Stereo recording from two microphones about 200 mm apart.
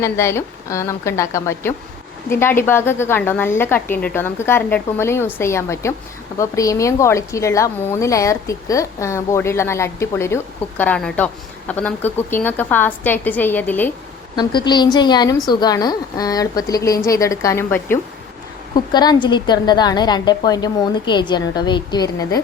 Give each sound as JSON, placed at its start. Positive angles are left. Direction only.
{"t": 0.0, "sound": "a woman's voice", "side_deg": 15}
{"t": 14.3, "sound": "a woman's voice", "side_deg": 20}